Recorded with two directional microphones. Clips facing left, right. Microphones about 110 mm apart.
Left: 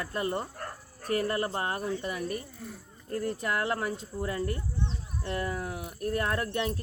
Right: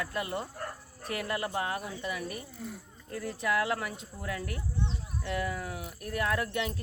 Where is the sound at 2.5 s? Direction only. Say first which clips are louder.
Right 2 dB; 15° right (ahead or behind).